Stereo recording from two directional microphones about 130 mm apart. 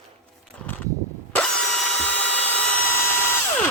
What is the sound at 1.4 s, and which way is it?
Tools, 5° left (ahead or behind).